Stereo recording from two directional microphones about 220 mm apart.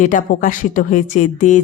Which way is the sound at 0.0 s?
35° left (ahead or behind).